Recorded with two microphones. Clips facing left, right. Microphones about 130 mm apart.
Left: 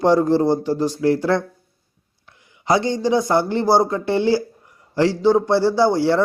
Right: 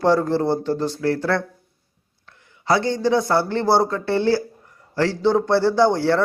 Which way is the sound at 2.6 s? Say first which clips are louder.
Left 1 dB; 15° left (ahead or behind).